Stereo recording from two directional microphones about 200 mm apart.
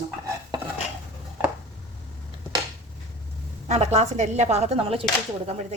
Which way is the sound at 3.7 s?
35° right (ahead or behind).